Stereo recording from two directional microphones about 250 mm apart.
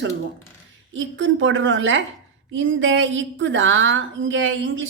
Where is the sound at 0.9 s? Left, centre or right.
Right.